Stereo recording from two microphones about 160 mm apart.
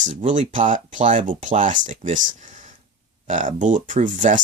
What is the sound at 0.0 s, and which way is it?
Speech, 50° right (ahead or behind).